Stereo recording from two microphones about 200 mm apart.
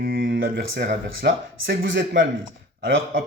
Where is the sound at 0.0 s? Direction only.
50° right (ahead or behind); by 2.2 s 70° right (ahead or behind).